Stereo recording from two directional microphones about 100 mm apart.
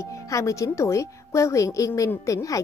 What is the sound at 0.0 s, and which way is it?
A woman's voice, 30° left (ahead or behind).